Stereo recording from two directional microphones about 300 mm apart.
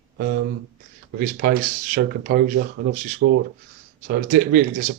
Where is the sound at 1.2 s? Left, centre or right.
Right.